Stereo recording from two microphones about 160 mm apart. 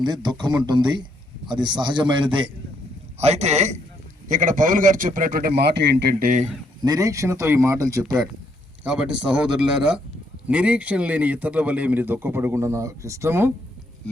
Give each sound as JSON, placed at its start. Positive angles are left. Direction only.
{"t": 0.0, "sound": "speech", "side_deg": -25}
{"t": 3.2, "sound": "a man's voice", "side_deg": -45}
{"t": 6.8, "sound": "speech", "side_deg": -20}
{"t": 8.8, "sound": "speech", "side_deg": -5}